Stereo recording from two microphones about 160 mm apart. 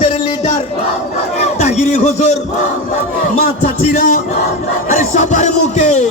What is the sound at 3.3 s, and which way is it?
Speech, 55° left (ahead or behind).